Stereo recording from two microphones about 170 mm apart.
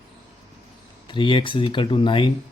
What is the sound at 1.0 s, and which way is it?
Speech, 30° left (ahead or behind).